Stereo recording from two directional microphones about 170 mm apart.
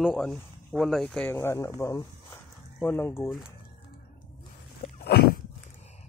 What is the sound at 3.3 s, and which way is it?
Speech, centre (ahead or behind).